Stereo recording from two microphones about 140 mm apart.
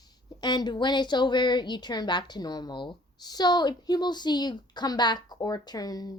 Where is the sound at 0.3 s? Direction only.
30° left (ahead or behind).